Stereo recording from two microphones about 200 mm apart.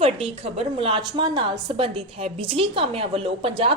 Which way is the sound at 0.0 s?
30° right (ahead or behind).